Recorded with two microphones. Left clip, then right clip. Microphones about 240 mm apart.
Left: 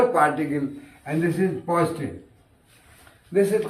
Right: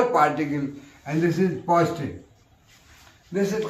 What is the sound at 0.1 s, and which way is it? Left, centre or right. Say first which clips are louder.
A man's voice: even; right.